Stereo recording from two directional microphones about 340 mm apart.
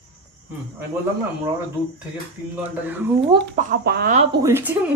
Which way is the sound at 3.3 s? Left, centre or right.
Right.